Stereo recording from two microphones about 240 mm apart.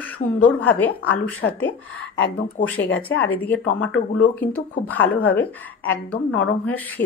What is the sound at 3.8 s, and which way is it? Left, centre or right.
Speech, left.